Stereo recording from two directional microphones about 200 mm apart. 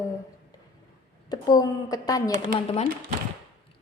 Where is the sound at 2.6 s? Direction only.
30° left (ahead or behind).